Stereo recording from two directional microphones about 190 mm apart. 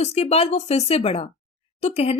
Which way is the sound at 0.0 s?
35° left (ahead or behind).